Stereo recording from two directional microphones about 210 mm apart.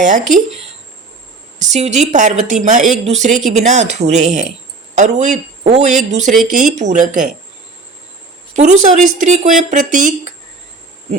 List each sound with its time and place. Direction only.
1.5 s a woman's voice: 35° right (ahead or behind)
8.5 s a woman's voice: 35° right (ahead or behind)